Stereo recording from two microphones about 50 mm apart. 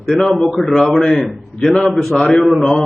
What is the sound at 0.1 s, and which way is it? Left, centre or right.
A man's voice, centre.